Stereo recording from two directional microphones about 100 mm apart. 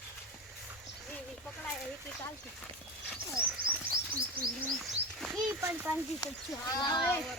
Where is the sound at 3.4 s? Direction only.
30° left (ahead or behind).